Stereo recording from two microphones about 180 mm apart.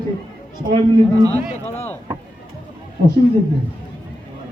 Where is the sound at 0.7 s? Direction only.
25° right (ahead or behind).